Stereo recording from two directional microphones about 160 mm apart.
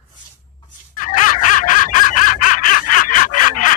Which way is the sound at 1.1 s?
55° left (ahead or behind).